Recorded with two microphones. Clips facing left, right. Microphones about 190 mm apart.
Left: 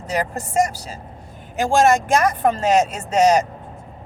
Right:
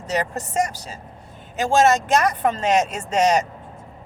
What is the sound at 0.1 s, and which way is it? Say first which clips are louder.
Speech: left 1 dB; 10° left (ahead or behind).